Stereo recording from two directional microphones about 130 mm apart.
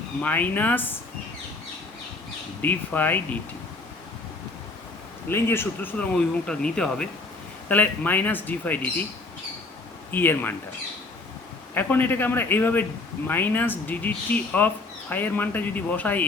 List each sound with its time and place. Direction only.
0.2 s speech: 15° left (ahead or behind)
2.6 s speech: 15° left (ahead or behind)
5.3 s speech: 20° left (ahead or behind)
10.1 s speech: 15° left (ahead or behind)
11.7 s speech: 15° left (ahead or behind)